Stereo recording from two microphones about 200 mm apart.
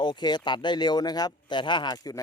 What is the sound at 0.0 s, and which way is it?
Speech, 20° left (ahead or behind).